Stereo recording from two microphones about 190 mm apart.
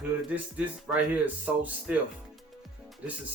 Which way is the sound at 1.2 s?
10° right (ahead or behind).